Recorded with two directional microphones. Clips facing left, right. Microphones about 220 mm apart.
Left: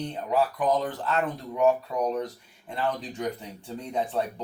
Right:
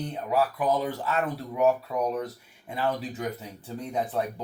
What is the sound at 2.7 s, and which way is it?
Speech, 10° right (ahead or behind).